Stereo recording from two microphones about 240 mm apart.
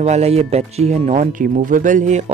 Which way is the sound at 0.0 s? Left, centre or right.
Right.